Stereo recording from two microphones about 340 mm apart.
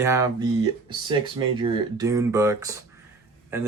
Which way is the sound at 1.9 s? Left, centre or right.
Centre.